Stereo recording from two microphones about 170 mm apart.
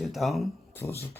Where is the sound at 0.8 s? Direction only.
15° left (ahead or behind).